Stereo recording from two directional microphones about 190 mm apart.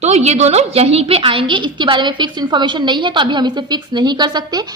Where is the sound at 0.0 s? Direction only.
35° right (ahead or behind).